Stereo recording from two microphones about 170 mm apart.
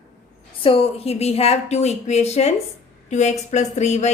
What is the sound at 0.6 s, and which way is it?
Speech, 35° left (ahead or behind).